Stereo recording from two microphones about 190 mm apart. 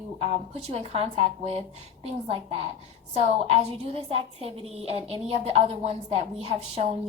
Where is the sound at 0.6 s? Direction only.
35° right (ahead or behind).